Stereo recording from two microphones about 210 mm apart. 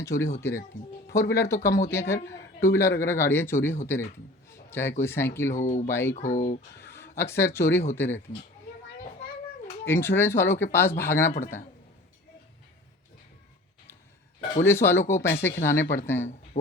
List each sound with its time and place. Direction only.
0.0 s speech: 15° left (ahead or behind)
1.3 s a man's voice: 15° left (ahead or behind)
5.5 s speech: 35° left (ahead or behind)
5.9 s speech: 10° left (ahead or behind)
6.1 s speech: 35° left (ahead or behind)
6.8 s speech: 10° left (ahead or behind)
9.8 s speech: 10° left (ahead or behind)
14.6 s speech: 10° left (ahead or behind)